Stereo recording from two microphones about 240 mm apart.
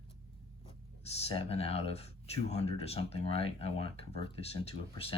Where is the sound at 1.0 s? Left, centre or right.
Left.